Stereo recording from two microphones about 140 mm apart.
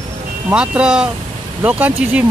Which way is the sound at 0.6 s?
5° right (ahead or behind).